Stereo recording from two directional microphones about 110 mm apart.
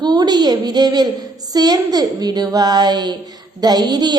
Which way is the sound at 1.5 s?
35° right (ahead or behind).